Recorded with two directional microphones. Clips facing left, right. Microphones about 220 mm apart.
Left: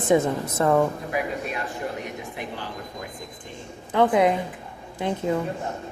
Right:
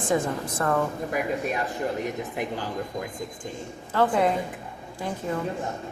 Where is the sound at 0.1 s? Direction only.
20° left (ahead or behind).